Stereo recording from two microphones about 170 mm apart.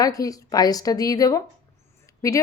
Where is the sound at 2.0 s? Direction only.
20° left (ahead or behind).